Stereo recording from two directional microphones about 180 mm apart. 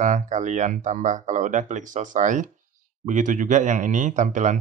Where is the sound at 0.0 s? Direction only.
45° right (ahead or behind).